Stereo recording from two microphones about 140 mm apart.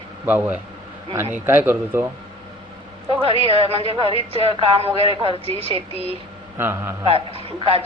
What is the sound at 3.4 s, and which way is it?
Speech, 45° right (ahead or behind).